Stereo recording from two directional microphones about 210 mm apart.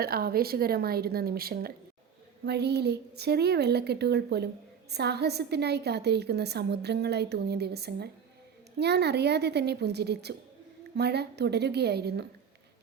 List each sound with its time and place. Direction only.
0.0 s a woman's voice: 45° right (ahead or behind)